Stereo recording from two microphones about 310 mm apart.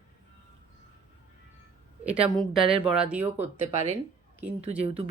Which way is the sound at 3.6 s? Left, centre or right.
Right.